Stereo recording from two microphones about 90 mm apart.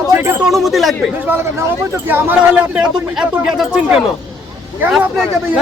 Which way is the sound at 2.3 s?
10° right (ahead or behind).